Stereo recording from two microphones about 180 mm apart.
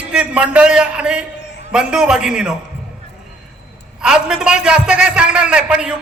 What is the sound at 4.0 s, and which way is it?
A man's voice, 5° right (ahead or behind).